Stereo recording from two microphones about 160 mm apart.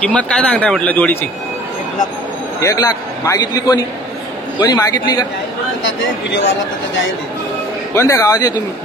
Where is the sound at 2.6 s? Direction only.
20° left (ahead or behind).